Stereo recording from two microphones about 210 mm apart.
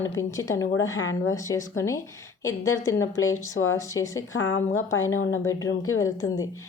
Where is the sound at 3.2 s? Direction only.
75° left (ahead or behind).